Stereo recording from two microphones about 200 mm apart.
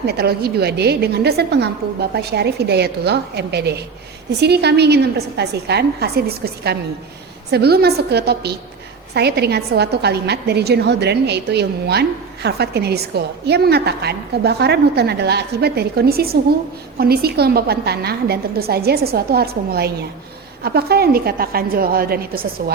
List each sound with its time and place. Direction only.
0.0 s a woman's voice: 50° right (ahead or behind)